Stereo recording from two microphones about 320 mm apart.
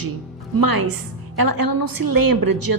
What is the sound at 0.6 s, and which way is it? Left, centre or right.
A woman's voice, right.